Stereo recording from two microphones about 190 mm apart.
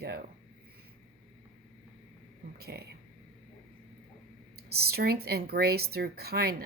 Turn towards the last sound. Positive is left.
turn(degrees=-55)  # may be behind; listen again after turning